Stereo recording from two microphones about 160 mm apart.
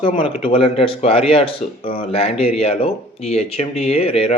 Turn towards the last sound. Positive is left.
turn(degrees=40)  # may be behind; listen again after turning